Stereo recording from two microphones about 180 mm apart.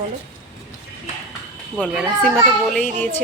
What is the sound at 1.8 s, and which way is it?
A child's voice, 5° left (ahead or behind).